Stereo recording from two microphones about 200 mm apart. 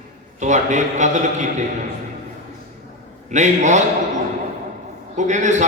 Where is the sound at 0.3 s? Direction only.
35° right (ahead or behind).